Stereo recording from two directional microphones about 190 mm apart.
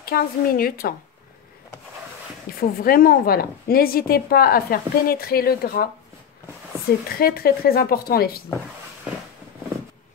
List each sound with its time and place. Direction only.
0.0 s speech: 50° left (ahead or behind)
2.5 s a sound: 50° left (ahead or behind)
2.8 s speech: 50° left (ahead or behind)
7.2 s speech: 50° left (ahead or behind)